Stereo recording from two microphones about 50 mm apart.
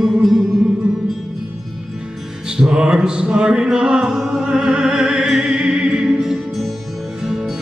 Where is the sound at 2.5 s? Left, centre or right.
Centre.